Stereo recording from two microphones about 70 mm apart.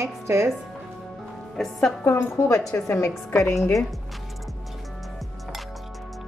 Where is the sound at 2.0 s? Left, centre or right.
Left.